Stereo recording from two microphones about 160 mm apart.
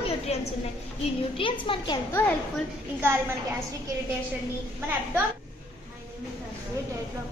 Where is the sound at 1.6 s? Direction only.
30° left (ahead or behind).